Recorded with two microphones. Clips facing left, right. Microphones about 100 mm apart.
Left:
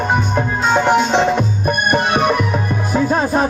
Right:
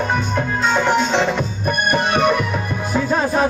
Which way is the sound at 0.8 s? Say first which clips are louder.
Left 4 dB; 15° left (ahead or behind).